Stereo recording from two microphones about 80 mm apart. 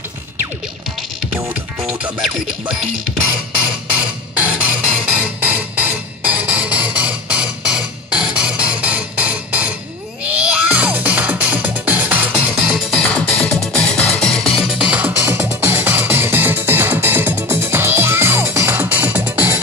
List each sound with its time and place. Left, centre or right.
1.9 s music: centre
4.0 s music: centre
13.0 s music: centre
14.6 s music: centre; by 19.6 s right